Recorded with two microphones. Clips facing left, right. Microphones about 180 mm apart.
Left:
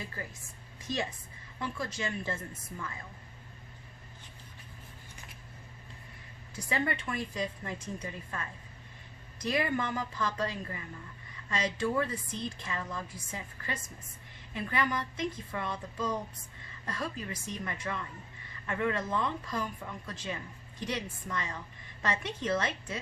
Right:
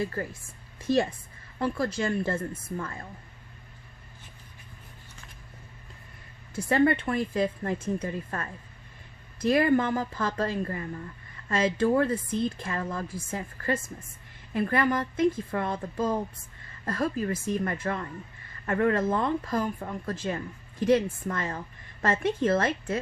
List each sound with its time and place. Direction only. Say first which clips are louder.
1.5 s a woman's voice: right 9 dB; 60° right (ahead or behind)
6.7 s speech: right 10 dB; 55° right (ahead or behind)